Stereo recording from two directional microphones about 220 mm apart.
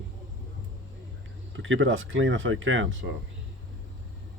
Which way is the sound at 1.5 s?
60° right (ahead or behind).